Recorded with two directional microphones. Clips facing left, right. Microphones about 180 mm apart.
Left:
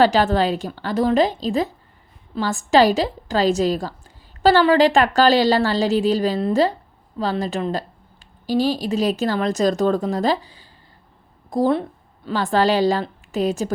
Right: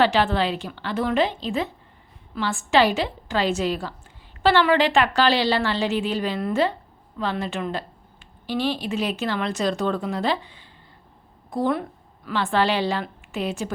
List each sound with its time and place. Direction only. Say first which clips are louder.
0.0 s a woman's voice: left 4 dB; 40° left (ahead or behind)